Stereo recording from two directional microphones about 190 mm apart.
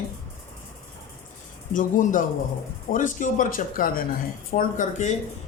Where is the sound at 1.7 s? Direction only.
45° left (ahead or behind).